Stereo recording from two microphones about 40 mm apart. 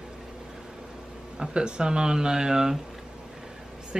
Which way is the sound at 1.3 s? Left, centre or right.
Right.